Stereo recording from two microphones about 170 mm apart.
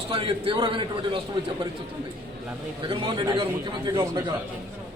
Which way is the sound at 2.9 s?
25° right (ahead or behind).